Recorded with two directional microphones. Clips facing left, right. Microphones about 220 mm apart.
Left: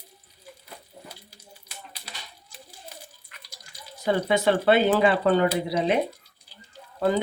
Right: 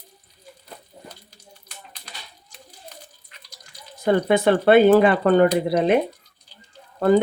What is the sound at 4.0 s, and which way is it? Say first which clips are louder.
Speech: right 5 dB; 55° right (ahead or behind).